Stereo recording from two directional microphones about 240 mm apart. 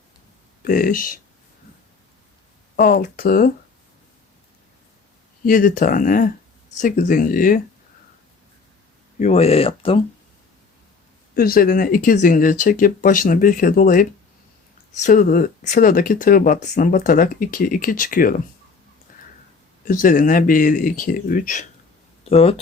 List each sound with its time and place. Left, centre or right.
0.6 s speech: left
2.7 s speech: left
5.5 s speech: left
9.1 s speech: left
11.3 s speech: left
19.1 s a sound: left
19.8 s speech: left